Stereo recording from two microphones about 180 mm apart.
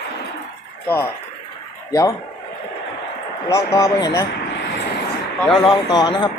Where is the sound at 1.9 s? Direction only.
20° left (ahead or behind).